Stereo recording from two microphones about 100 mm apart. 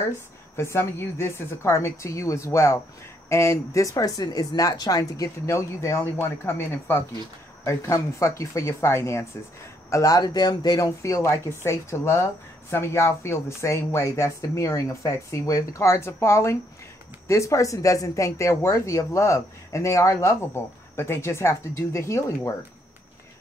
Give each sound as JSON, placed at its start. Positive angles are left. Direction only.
{"t": 0.6, "sound": "speech", "side_deg": 25}